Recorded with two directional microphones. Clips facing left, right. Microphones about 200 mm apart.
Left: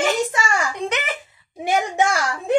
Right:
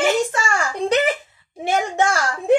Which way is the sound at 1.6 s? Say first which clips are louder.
Even; 15° left (ahead or behind).